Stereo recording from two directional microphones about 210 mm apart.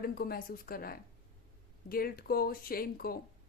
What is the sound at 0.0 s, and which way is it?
Speech, 45° left (ahead or behind).